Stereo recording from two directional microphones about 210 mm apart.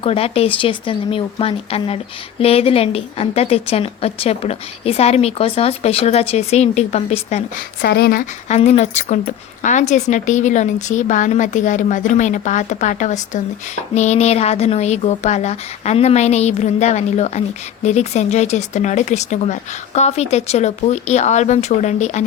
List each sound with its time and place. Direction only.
0.0 s a woman's voice: 25° left (ahead or behind)
7.8 s speech: 50° left (ahead or behind)
8.4 s speech: 30° left (ahead or behind)